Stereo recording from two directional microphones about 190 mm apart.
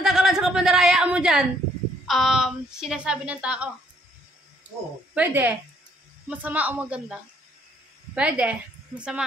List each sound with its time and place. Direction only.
0.0 s a sound: 5° right (ahead or behind)
2.0 s a woman's voice: centre (ahead or behind)
5.1 s a woman's voice: 10° right (ahead or behind)